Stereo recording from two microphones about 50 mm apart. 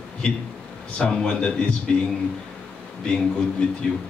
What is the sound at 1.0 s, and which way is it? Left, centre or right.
Speech, centre.